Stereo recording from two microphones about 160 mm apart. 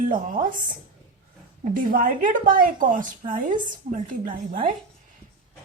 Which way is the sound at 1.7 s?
60° right (ahead or behind).